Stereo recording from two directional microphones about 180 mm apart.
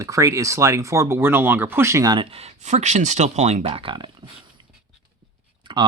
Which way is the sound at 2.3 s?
35° right (ahead or behind).